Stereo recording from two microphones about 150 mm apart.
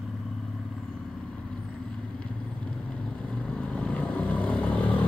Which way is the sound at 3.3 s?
5° left (ahead or behind).